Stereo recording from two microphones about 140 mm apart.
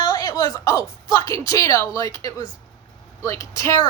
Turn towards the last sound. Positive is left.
turn(degrees=20)  # may be behind; listen again after turning